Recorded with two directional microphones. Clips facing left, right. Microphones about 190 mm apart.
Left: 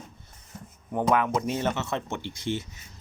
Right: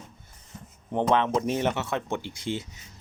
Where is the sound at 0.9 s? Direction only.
25° right (ahead or behind).